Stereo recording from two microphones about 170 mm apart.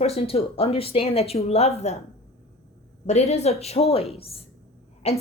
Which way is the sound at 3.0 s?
40° left (ahead or behind).